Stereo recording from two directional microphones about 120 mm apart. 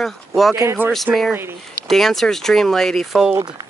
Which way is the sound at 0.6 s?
20° right (ahead or behind).